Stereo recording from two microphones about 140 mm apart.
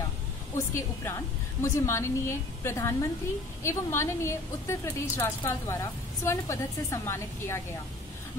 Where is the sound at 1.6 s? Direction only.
20° left (ahead or behind).